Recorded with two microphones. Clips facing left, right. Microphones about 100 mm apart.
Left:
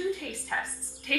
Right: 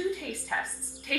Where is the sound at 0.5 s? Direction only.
5° right (ahead or behind).